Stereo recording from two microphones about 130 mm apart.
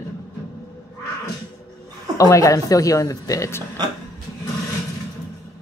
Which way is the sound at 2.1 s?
25° left (ahead or behind).